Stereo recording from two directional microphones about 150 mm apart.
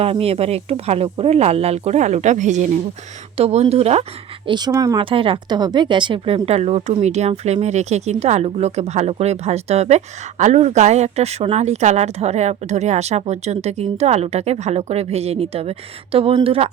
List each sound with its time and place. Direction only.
0.0 s speech: 40° right (ahead or behind)
3.3 s speech: 45° right (ahead or behind)
4.4 s speech: 30° right (ahead or behind)
4.9 s speech: 35° right (ahead or behind)